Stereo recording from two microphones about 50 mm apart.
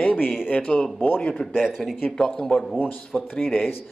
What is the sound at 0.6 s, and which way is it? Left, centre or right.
Speech, centre.